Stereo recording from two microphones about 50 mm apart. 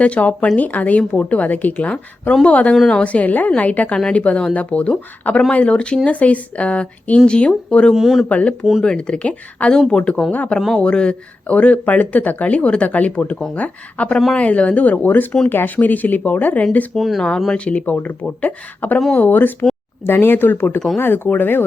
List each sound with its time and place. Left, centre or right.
0.0 s speech: left
7.9 s speech: centre
8.3 s speech: left
10.3 s speech: left
16.9 s speech: centre
17.5 s speech: left